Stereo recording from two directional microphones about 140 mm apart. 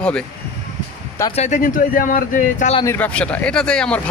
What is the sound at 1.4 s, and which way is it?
Speech, 60° left (ahead or behind).